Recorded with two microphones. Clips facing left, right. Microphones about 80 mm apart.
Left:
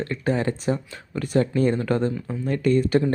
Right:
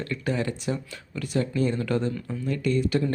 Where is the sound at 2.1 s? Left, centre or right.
Centre.